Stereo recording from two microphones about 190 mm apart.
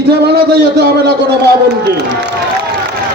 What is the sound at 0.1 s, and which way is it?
A man's voice, 60° right (ahead or behind).